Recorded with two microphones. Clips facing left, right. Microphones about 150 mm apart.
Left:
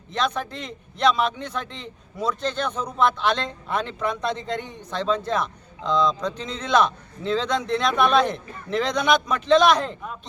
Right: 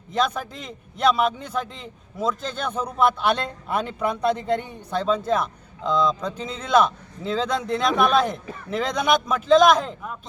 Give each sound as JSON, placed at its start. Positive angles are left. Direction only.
{"t": 0.1, "sound": "a man's voice", "side_deg": -5}